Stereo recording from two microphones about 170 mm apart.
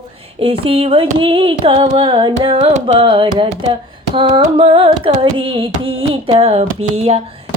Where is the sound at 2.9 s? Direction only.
30° right (ahead or behind).